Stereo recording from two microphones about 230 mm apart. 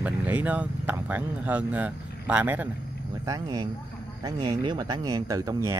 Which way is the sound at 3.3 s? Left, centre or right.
Centre.